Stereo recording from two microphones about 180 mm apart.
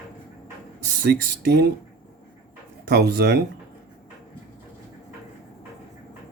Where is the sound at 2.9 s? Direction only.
65° right (ahead or behind).